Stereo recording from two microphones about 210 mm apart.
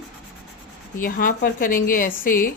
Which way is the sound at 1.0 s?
40° left (ahead or behind).